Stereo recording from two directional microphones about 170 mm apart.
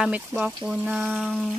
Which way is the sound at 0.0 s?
5° right (ahead or behind).